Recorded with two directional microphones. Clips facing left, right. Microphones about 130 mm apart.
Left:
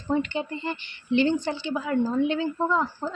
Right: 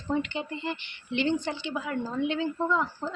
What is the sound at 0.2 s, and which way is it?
Speech, 40° left (ahead or behind).